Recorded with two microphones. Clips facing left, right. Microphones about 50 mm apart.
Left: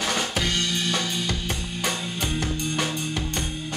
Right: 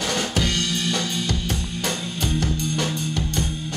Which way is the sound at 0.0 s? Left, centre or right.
Centre.